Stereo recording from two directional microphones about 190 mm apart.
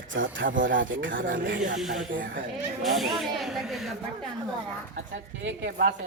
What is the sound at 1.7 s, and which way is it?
Speech, centre (ahead or behind).